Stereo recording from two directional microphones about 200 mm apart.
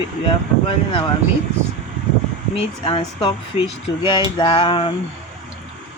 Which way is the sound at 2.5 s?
25° left (ahead or behind).